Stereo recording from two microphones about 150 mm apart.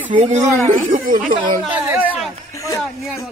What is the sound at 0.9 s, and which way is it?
Speech, 65° right (ahead or behind).